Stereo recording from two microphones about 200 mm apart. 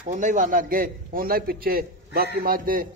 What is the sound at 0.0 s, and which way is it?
A man's voice, 40° right (ahead or behind).